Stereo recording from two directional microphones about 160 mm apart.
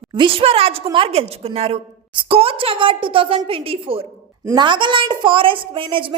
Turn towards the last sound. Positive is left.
turn(degrees=-35)  # may be behind; listen again after turning